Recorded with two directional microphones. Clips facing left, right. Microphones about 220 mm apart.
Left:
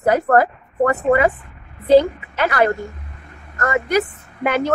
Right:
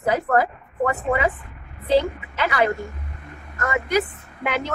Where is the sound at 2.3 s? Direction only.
45° left (ahead or behind).